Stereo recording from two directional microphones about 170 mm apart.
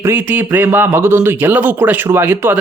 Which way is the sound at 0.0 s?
10° right (ahead or behind).